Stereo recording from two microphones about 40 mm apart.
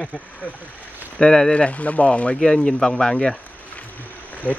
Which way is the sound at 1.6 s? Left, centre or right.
Left.